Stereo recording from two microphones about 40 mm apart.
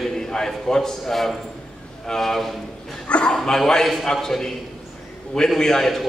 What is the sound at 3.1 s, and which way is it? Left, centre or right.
Speech, left.